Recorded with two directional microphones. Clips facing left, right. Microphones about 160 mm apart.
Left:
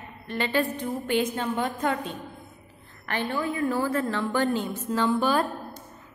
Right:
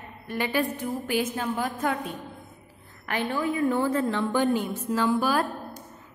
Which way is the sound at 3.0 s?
10° right (ahead or behind).